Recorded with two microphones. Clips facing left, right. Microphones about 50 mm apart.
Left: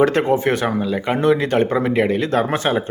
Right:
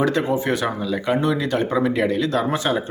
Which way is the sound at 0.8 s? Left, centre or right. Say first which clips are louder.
Left 2 dB; left.